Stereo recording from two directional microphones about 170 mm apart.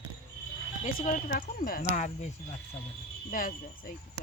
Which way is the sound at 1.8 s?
40° left (ahead or behind).